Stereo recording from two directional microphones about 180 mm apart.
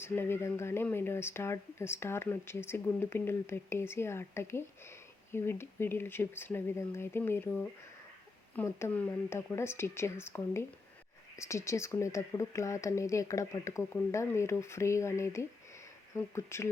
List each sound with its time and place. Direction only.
0.0 s speech: 15° left (ahead or behind)